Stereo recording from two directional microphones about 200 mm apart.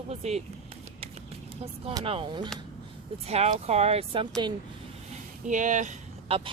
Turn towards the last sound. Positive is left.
turn(degrees=-30)  # may be behind; listen again after turning